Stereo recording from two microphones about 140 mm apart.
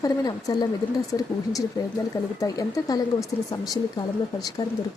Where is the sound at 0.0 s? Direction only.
25° left (ahead or behind).